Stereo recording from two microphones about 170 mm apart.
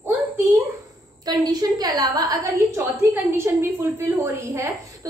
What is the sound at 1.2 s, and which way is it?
A woman's voice, 20° right (ahead or behind).